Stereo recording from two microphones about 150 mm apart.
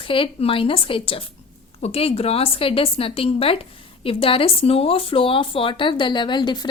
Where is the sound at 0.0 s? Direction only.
35° left (ahead or behind).